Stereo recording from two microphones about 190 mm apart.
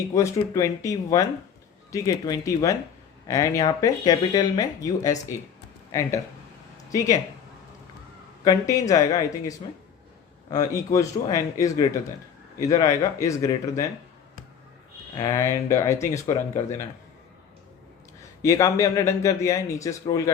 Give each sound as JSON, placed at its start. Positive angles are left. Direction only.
{"t": 0.1, "sound": "speech", "side_deg": 15}
{"t": 8.4, "sound": "speech", "side_deg": 15}
{"t": 15.1, "sound": "speech", "side_deg": 20}
{"t": 18.4, "sound": "speech", "side_deg": 15}